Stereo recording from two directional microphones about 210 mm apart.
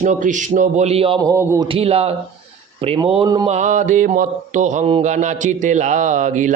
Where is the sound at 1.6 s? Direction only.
25° right (ahead or behind).